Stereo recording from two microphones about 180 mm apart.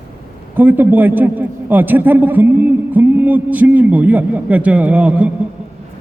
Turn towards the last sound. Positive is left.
turn(degrees=-5)  # may be behind; listen again after turning